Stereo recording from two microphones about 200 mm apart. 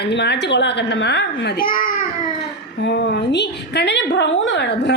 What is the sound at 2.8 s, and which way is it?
Speech, 60° left (ahead or behind).